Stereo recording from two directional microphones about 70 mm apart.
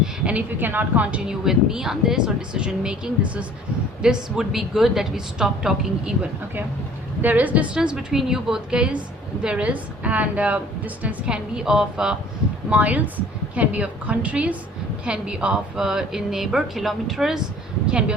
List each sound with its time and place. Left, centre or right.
0.0 s a woman's voice: centre
1.5 s a woman's voice: centre
7.2 s a woman's voice: right
7.8 s a woman's voice: centre
11.5 s a woman's voice: centre
12.7 s a woman's voice: right